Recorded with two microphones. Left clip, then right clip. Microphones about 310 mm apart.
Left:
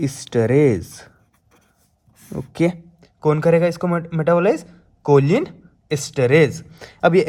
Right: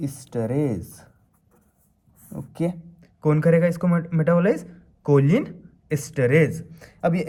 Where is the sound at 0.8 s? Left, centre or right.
Left.